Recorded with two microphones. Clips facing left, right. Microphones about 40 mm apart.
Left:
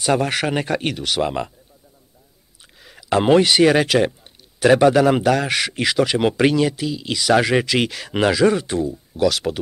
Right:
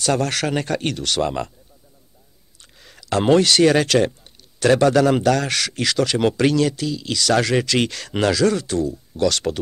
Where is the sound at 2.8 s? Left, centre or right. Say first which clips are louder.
Left 2 dB; centre.